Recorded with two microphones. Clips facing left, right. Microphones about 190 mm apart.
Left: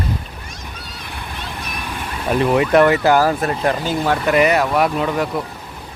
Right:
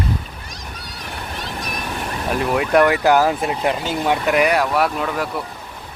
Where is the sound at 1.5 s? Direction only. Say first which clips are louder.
Right 2 dB; 40° right (ahead or behind).